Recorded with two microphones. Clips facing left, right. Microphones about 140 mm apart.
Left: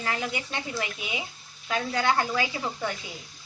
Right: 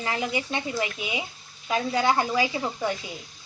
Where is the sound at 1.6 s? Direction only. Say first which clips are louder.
Right 3 dB; 10° right (ahead or behind).